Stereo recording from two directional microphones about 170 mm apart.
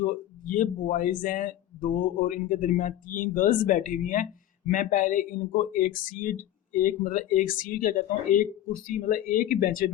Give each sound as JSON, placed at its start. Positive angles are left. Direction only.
{"t": 0.0, "sound": "speech", "side_deg": 50}